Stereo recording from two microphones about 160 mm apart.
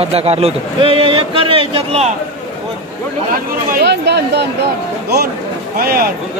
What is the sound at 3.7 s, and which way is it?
Speech, 90° right.